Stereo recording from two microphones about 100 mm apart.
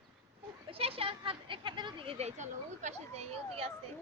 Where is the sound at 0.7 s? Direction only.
70° right (ahead or behind).